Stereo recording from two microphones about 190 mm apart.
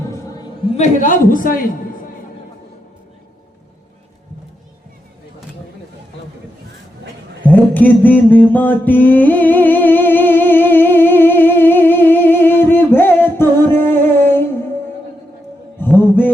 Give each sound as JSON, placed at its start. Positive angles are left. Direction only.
{"t": 0.1, "sound": "a sound", "side_deg": 15}
{"t": 0.8, "sound": "a man's voice", "side_deg": 40}
{"t": 7.4, "sound": "mantra", "side_deg": 10}
{"t": 15.8, "sound": "mantra", "side_deg": 10}